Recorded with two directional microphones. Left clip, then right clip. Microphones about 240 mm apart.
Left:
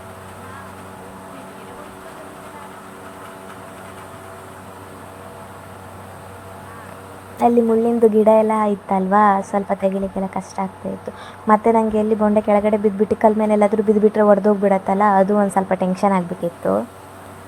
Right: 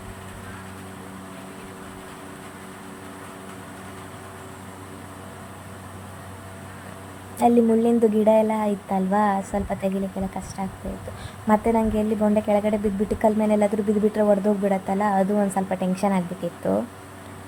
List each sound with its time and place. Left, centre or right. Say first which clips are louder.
7.3 s a woman's voice: left 3 dB; centre